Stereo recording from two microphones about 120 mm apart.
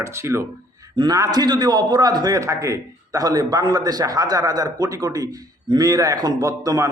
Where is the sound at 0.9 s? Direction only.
40° right (ahead or behind).